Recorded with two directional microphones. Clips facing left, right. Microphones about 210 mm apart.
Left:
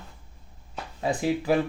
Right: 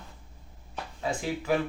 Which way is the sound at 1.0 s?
35° left (ahead or behind).